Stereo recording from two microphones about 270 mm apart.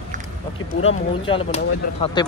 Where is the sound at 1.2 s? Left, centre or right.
Centre.